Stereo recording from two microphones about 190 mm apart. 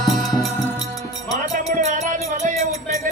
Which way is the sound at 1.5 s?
40° right (ahead or behind).